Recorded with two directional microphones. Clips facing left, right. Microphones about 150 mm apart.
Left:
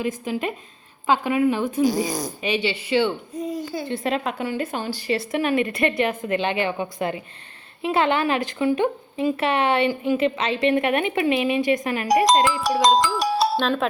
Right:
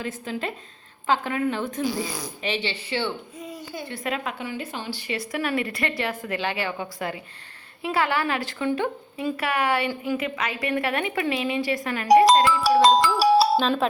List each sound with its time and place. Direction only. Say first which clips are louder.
0.0 s a woman's voice: left 5 dB; 15° left (ahead or behind)
2.0 s speech: left 6 dB; 40° left (ahead or behind)
2.4 s a woman's voice: left 3 dB; 15° left (ahead or behind)
3.3 s a sound: left 9 dB; 35° left (ahead or behind)
3.8 s a woman's voice: left 4 dB; 30° left (ahead or behind)
4.4 s speech: left 6 dB; 50° left (ahead or behind); by 12.2 s 20° left (ahead or behind)
12.6 s speech: right 1 dB; 5° right (ahead or behind)